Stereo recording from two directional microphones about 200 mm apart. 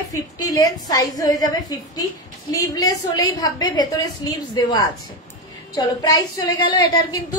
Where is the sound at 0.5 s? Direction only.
15° left (ahead or behind).